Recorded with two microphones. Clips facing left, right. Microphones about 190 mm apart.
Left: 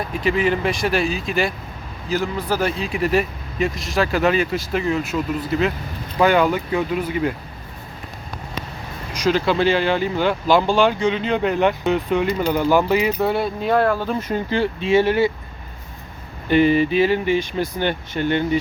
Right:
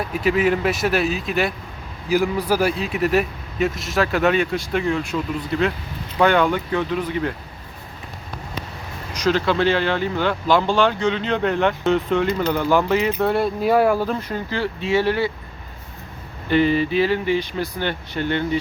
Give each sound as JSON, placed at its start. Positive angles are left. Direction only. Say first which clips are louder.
{"t": 0.1, "sound": "speech", "louder": "right 1 dB", "side_deg": -5}
{"t": 2.0, "sound": "speech", "louder": "right 3 dB", "side_deg": -10}
{"t": 9.1, "sound": "speech", "louder": "left 1 dB", "side_deg": 10}
{"t": 14.2, "sound": "speech", "louder": "left 4 dB", "side_deg": 20}
{"t": 16.5, "sound": "speech", "louder": "left 2 dB", "side_deg": 15}